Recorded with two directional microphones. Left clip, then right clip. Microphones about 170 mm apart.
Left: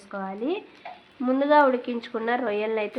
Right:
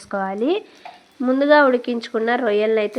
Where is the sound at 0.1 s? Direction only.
45° right (ahead or behind).